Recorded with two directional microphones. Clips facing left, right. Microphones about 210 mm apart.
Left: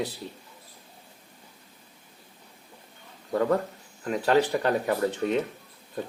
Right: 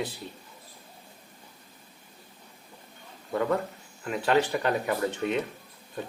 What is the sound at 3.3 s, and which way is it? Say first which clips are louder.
Speech: left 3 dB; 35° left (ahead or behind).